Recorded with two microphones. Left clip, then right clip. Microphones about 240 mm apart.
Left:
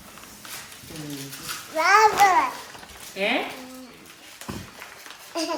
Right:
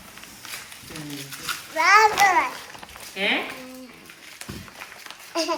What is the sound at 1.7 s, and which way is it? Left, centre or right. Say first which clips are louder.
Speech: right 1 dB; centre.